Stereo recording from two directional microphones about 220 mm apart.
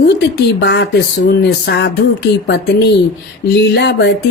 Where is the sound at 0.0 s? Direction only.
50° left (ahead or behind).